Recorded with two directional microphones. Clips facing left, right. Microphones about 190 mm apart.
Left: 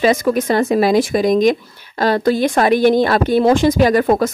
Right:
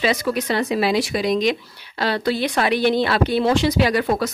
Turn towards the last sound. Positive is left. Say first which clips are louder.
# left 6 dB
turn(degrees=45)  # may be behind; listen again after turning